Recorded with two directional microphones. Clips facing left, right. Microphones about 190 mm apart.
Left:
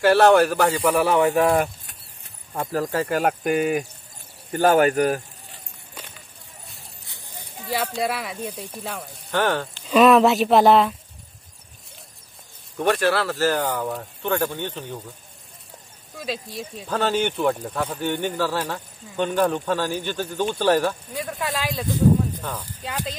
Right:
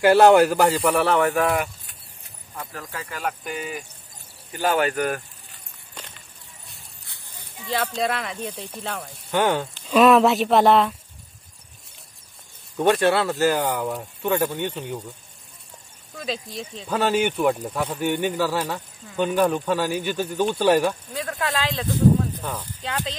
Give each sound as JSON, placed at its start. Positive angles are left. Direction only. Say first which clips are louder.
{"t": 0.0, "sound": "speech", "louder": "right 1 dB", "side_deg": -15}
{"t": 0.9, "sound": "speech", "louder": "left 1 dB", "side_deg": 15}
{"t": 2.7, "sound": "speech", "louder": "left 15 dB", "side_deg": 40}
{"t": 3.1, "sound": "speech", "louder": "left 9 dB", "side_deg": 60}
{"t": 4.5, "sound": "speech", "louder": "left 5 dB", "side_deg": 50}
{"t": 7.1, "sound": "a sound", "louder": "left 6 dB", "side_deg": 15}
{"t": 7.7, "sound": "speech", "louder": "even", "side_deg": 10}
{"t": 9.3, "sound": "speech", "louder": "right 1 dB", "side_deg": -15}
{"t": 9.8, "sound": "speech", "louder": "left 1 dB", "side_deg": 0}
{"t": 12.7, "sound": "speech", "louder": "right 2 dB", "side_deg": -20}
{"t": 16.2, "sound": "speech", "louder": "even", "side_deg": 5}
{"t": 21.1, "sound": "speech", "louder": "right 1 dB", "side_deg": 15}
{"t": 22.4, "sound": "speech", "louder": "right 1 dB", "side_deg": -10}
{"t": 22.8, "sound": "speech", "louder": "right 1 dB", "side_deg": 10}